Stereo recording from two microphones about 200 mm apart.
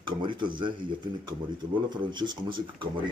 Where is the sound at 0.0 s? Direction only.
25° right (ahead or behind).